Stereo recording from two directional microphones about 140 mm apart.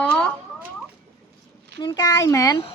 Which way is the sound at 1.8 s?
25° left (ahead or behind).